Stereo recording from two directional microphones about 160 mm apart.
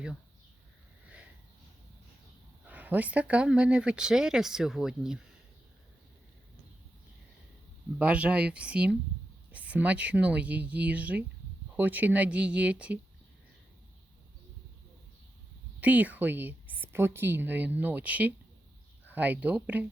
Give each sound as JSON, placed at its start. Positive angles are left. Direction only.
{"t": 1.0, "sound": "sniff", "side_deg": -5}
{"t": 2.6, "sound": "speech", "side_deg": -10}
{"t": 7.9, "sound": "a woman's voice", "side_deg": -10}
{"t": 15.8, "sound": "a woman's voice", "side_deg": -10}